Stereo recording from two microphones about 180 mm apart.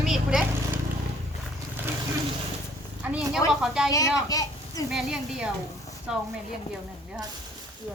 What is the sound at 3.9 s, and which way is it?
Speech, 20° left (ahead or behind).